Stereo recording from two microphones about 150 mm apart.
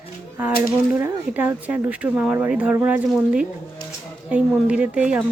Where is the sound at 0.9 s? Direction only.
10° right (ahead or behind).